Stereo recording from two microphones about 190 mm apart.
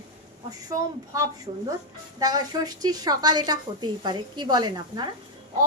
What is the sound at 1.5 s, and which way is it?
Speech, 30° right (ahead or behind).